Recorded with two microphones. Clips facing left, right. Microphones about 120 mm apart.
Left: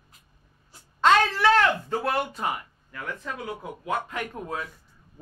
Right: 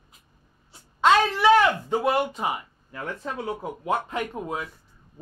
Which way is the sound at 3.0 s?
30° right (ahead or behind).